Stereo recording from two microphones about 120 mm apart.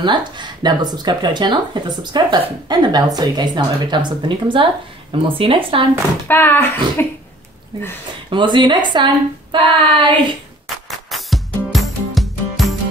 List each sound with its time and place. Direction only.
0.0 s speech: 40° right (ahead or behind)
6.2 s speech: 15° left (ahead or behind)
8.3 s speech: 40° right (ahead or behind)
11.1 s music: centre (ahead or behind)